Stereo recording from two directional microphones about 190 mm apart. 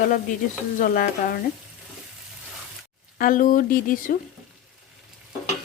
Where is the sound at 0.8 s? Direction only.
50° left (ahead or behind).